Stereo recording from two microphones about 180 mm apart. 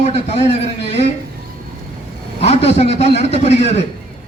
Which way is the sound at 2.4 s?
35° left (ahead or behind).